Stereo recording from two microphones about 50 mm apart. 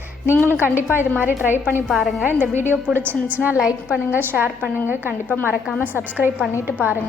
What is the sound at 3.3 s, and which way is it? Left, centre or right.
Speech, right.